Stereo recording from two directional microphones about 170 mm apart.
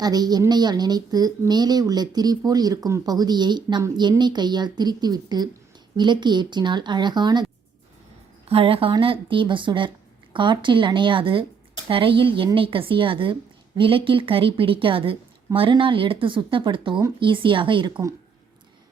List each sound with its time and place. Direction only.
0.0 s a woman's voice: 25° right (ahead or behind)
8.4 s a woman's voice: 35° right (ahead or behind)